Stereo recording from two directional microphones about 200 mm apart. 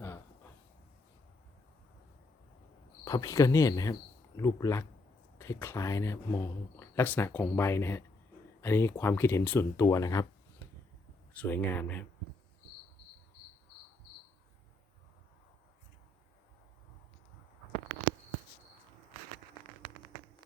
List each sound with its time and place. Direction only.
3.0 s speech: 15° left (ahead or behind)
10.6 s a sound: 10° left (ahead or behind)
11.3 s speech: 10° left (ahead or behind)